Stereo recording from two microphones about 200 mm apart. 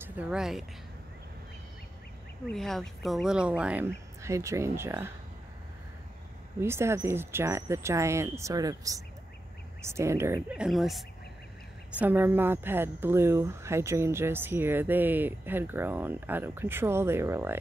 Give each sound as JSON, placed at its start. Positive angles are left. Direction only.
{"t": 0.0, "sound": "speech", "side_deg": -10}
{"t": 2.5, "sound": "speech", "side_deg": 0}
{"t": 6.6, "sound": "speech", "side_deg": -15}